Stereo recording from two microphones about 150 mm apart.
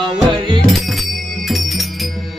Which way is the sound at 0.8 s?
Centre (ahead or behind).